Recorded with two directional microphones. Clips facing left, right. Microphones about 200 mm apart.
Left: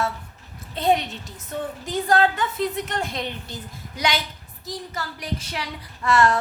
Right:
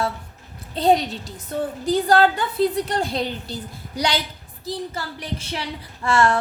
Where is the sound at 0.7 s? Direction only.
35° right (ahead or behind).